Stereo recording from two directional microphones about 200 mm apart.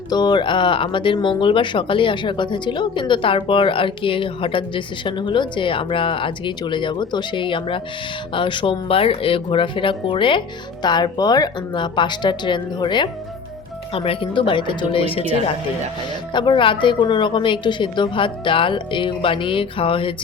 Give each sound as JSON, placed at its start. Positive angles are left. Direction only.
{"t": 0.1, "sound": "speech", "side_deg": 20}